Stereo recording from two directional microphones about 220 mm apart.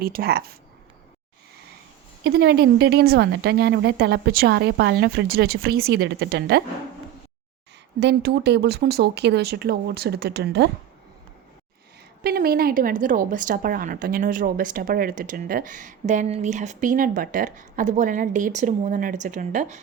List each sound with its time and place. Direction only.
0.0 s a woman's voice: 45° right (ahead or behind)
2.2 s a woman's voice: 45° right (ahead or behind)
7.9 s a woman's voice: 50° right (ahead or behind)
12.2 s speech: 45° right (ahead or behind)